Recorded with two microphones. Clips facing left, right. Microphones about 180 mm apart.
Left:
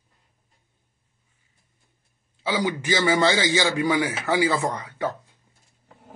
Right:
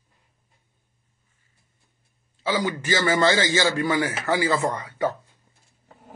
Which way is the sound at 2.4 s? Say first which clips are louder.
Even; 15° left (ahead or behind).